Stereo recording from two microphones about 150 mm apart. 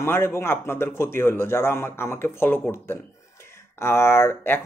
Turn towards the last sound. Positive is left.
turn(degrees=15)  # may be behind; listen again after turning